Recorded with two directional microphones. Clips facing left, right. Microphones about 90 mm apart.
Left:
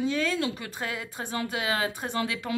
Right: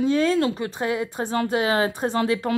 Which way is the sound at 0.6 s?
25° right (ahead or behind).